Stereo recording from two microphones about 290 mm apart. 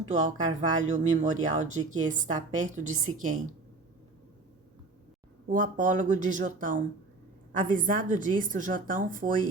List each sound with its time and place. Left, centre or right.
0.1 s a woman's voice: right
5.5 s a woman's voice: right